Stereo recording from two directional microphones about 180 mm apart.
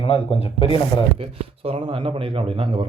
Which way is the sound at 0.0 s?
35° left (ahead or behind).